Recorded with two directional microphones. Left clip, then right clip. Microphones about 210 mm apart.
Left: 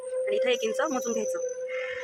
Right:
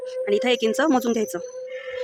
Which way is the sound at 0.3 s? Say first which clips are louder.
Right 6 dB; 60° right (ahead or behind).